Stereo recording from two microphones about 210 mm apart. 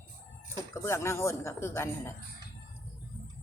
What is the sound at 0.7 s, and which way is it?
Speech, 10° left (ahead or behind).